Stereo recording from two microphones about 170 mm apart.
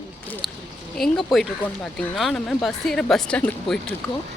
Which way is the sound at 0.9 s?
Centre (ahead or behind).